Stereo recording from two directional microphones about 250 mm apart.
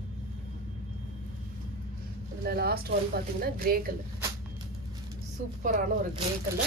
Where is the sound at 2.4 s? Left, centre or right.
Right.